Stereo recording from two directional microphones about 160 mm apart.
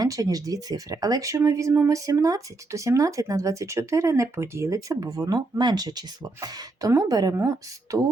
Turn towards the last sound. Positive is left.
turn(degrees=-20)  # may be behind; listen again after turning